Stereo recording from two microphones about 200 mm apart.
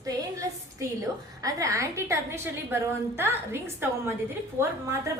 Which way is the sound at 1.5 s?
15° right (ahead or behind).